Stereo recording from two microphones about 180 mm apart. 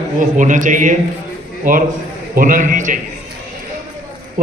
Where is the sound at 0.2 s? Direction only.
45° right (ahead or behind).